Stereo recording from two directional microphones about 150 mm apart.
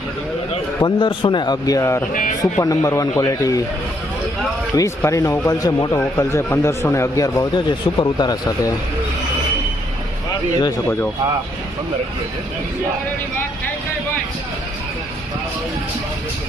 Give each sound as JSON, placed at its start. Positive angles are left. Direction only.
{"t": 0.8, "sound": "speech", "side_deg": 30}
{"t": 4.8, "sound": "speech", "side_deg": 20}